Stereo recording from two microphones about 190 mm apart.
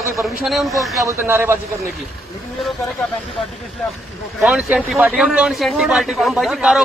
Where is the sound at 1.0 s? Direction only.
15° right (ahead or behind).